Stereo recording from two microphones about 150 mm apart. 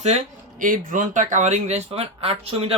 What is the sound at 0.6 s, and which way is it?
A woman's voice, 65° right (ahead or behind).